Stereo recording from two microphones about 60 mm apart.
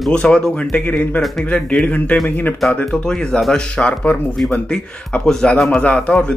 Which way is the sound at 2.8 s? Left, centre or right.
Centre.